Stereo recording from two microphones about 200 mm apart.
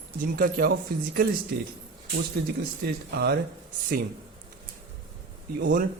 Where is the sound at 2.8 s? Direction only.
55° right (ahead or behind).